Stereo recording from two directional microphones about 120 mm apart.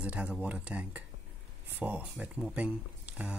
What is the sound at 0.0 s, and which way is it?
Speech, 10° right (ahead or behind).